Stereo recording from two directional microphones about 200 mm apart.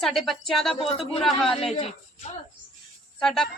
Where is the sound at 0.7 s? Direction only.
30° left (ahead or behind).